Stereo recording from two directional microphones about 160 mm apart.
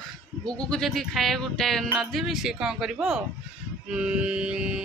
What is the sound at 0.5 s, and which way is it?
Speech, 5° left (ahead or behind).